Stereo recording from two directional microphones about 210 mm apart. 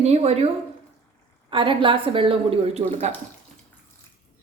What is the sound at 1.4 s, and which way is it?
A woman's voice, 25° right (ahead or behind).